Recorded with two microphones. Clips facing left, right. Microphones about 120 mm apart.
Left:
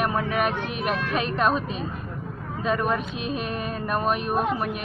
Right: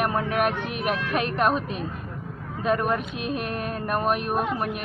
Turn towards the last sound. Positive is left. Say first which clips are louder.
# left 1 dB
turn(degrees=0)  # may be behind; listen again after turning